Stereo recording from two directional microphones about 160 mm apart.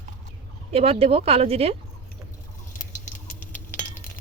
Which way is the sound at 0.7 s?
40° right (ahead or behind).